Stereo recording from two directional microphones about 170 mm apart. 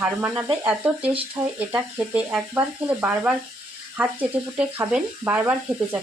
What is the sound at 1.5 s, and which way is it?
Speech, 10° right (ahead or behind).